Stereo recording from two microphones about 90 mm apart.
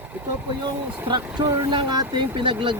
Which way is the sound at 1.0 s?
55° right (ahead or behind).